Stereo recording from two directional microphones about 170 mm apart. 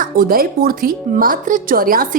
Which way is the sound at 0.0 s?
55° right (ahead or behind).